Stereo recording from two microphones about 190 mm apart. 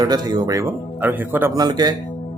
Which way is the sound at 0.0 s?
20° right (ahead or behind).